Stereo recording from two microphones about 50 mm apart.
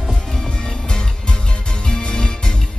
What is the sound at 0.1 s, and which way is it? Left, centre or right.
Music, centre.